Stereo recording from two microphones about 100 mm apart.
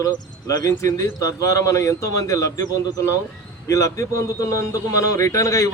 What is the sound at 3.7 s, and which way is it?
A man's voice, 30° left (ahead or behind).